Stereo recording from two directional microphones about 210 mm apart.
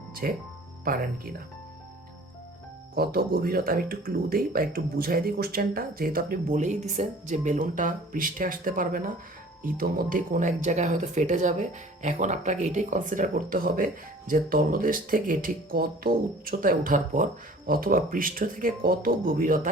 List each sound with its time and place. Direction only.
0.1 s music: 45° right (ahead or behind)
0.9 s speech: 45° right (ahead or behind)
2.9 s speech: 45° right (ahead or behind)